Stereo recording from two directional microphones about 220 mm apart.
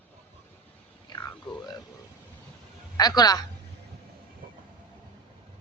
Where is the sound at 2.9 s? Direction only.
15° left (ahead or behind).